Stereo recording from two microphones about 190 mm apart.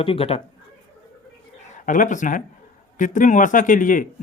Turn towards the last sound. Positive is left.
turn(degrees=45)  # may be behind; listen again after turning